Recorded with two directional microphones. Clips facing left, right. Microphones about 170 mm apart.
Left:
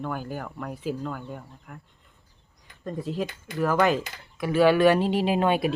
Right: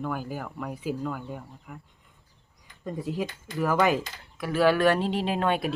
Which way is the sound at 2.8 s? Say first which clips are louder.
Left 1 dB; 10° right (ahead or behind).